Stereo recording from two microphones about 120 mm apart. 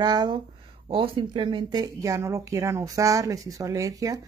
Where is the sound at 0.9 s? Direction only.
45° right (ahead or behind).